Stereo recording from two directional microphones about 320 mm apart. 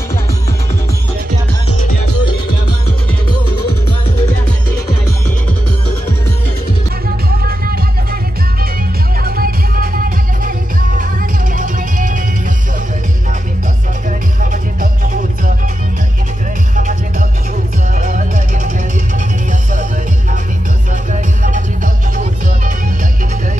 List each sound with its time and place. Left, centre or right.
7.4 s music: right
9.2 s music: right
14.4 s music: right
17.9 s music: right
20.9 s music: right